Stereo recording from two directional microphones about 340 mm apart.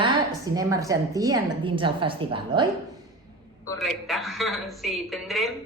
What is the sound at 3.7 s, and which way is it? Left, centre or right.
A woman's voice, centre.